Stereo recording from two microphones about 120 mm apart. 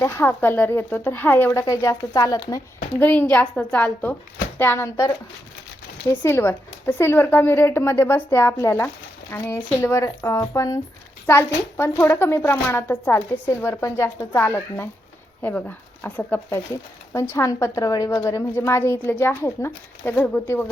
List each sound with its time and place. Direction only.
0.0 s a woman's voice: 20° left (ahead or behind)
3.0 s a woman's voice: 15° left (ahead or behind)